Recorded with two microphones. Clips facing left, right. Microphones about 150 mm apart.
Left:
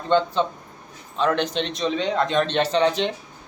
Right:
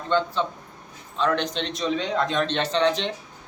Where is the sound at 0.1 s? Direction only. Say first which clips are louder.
Left 4 dB; 25° left (ahead or behind).